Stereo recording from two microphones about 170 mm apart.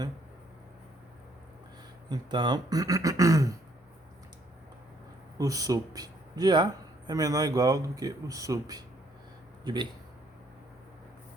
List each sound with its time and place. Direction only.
2.0 s speech: 25° right (ahead or behind)
5.4 s speech: 20° right (ahead or behind)